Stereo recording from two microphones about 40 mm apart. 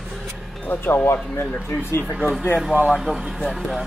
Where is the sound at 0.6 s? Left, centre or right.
Left.